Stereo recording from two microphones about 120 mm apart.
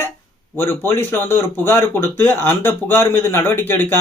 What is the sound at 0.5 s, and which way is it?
Speech, 20° left (ahead or behind).